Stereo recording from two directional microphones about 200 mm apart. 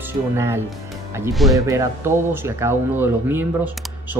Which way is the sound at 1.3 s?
Centre (ahead or behind).